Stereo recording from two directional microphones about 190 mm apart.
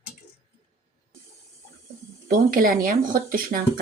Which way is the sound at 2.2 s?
50° right (ahead or behind).